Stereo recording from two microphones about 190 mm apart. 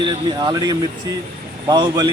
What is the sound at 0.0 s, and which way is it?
Speech, 25° right (ahead or behind).